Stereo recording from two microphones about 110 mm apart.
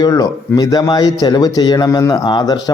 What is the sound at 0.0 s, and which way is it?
A man's voice, 35° left (ahead or behind).